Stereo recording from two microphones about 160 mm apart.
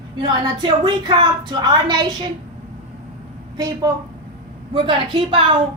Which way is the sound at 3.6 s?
25° right (ahead or behind).